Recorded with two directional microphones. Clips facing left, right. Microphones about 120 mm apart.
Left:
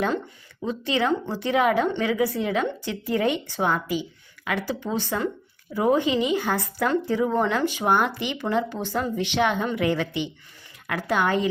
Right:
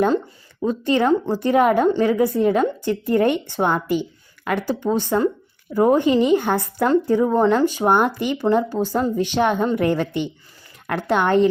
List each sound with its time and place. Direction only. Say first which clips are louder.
0.6 s speech: right 6 dB; 50° right (ahead or behind)
6.8 s speech: right 6 dB; 40° right (ahead or behind)